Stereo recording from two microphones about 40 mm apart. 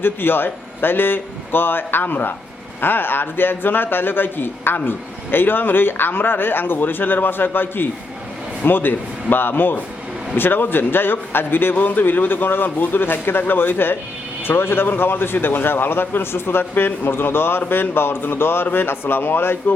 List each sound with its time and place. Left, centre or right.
0.0 s a man's voice: left
16.7 s a man's voice: left